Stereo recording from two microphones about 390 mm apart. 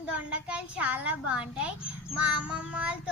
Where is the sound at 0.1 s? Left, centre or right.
Centre.